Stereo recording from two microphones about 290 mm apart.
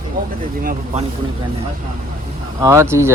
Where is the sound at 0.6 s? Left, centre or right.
Right.